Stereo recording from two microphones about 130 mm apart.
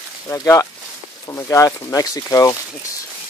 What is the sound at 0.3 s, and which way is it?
Speech, 25° left (ahead or behind).